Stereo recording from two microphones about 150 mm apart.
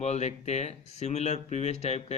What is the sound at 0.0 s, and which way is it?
Speech, 45° left (ahead or behind).